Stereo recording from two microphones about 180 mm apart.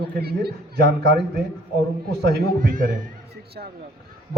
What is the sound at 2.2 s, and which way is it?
Speech, 55° right (ahead or behind).